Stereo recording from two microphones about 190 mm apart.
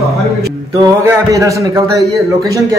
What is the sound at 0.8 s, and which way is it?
Speech, 15° right (ahead or behind).